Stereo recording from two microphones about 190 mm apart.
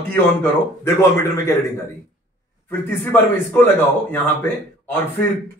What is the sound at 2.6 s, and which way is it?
Speech, 10° left (ahead or behind).